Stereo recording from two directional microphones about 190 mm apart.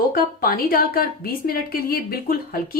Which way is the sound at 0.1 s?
50° left (ahead or behind).